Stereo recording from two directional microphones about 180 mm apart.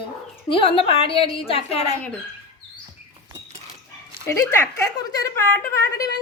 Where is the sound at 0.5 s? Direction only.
30° left (ahead or behind).